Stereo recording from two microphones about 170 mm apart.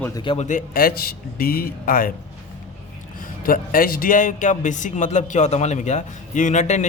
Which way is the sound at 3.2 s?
55° left (ahead or behind).